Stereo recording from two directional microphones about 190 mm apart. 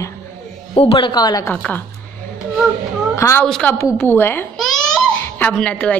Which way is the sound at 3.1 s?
15° left (ahead or behind).